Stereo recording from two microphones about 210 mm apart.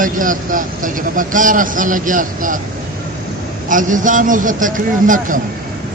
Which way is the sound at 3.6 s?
40° right (ahead or behind).